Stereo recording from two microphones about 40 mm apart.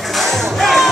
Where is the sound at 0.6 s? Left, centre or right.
Centre.